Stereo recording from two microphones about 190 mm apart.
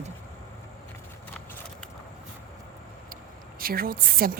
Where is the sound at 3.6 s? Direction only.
50° right (ahead or behind).